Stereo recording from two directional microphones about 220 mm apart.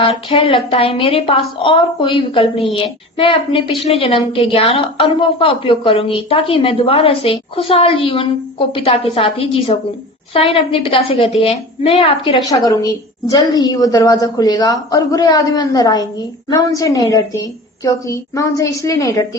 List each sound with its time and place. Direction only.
0.1 s a woman's voice: 25° left (ahead or behind)